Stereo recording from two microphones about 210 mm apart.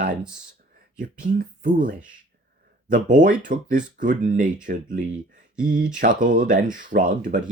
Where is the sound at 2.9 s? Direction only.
40° right (ahead or behind).